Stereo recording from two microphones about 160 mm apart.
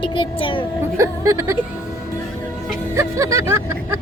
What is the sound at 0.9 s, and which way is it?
Speech, 20° right (ahead or behind).